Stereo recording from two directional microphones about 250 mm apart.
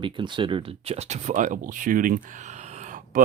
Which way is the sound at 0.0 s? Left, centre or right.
Centre.